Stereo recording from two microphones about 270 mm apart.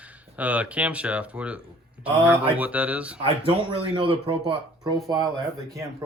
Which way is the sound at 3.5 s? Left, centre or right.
Centre.